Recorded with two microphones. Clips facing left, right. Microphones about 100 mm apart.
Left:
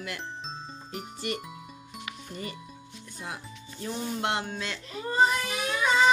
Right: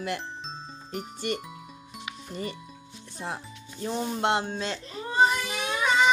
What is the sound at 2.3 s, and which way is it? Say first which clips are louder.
Speech: right 5 dB; 30° right (ahead or behind).